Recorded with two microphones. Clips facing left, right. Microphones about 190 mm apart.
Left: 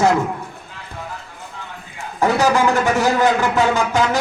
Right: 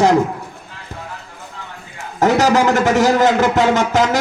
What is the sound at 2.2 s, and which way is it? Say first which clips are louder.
A man's voice: right 2 dB; 40° right (ahead or behind).